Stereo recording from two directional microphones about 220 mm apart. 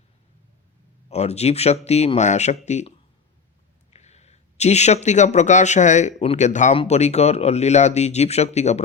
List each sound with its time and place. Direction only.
1.1 s speech: 30° left (ahead or behind)
3.9 s a man's voice: 30° left (ahead or behind)